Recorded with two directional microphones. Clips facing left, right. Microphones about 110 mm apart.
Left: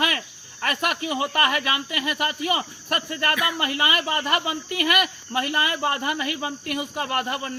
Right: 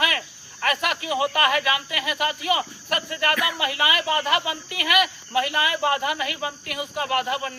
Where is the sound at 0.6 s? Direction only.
45° left (ahead or behind).